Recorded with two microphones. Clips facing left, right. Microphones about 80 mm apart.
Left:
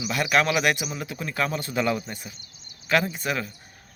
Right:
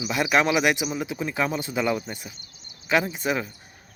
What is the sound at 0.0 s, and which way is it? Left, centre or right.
Speech, centre.